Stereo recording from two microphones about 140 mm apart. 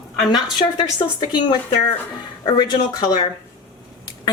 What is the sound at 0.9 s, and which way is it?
A woman's voice, 35° left (ahead or behind).